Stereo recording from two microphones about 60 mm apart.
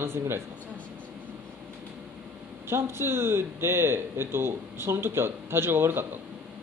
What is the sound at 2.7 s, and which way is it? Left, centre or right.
A man's voice, right.